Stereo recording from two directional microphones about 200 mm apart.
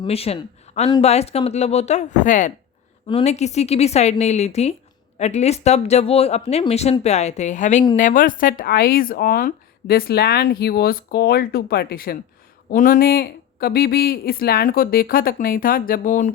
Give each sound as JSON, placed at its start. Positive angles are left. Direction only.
{"t": 0.0, "sound": "speech", "side_deg": 30}